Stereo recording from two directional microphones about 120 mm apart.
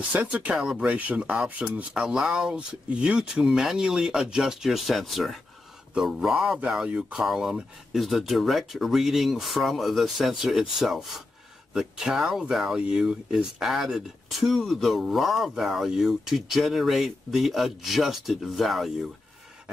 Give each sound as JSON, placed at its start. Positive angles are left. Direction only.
{"t": 0.1, "sound": "speech", "side_deg": -10}